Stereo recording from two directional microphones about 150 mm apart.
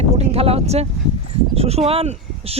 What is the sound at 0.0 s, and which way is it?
Speech, 45° right (ahead or behind).